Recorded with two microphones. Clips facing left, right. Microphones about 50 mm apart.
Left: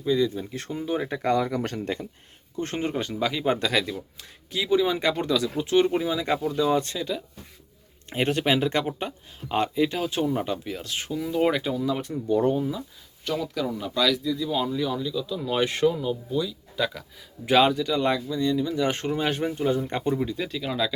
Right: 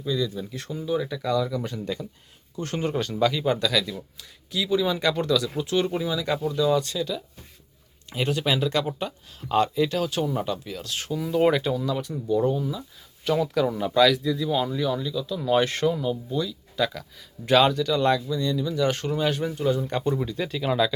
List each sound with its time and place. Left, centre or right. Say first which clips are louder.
0.0 s speech: left 3 dB; left
2.6 s speech: even; left
3.0 s speech: right 3 dB; centre
3.4 s speech: even; left
11.1 s speech: right 2 dB; centre
12.3 s speech: left 1 dB; left
13.2 s speech: right 5 dB; centre; by 20.0 s left
20.0 s speech: even; centre
20.3 s speech: right 4 dB; centre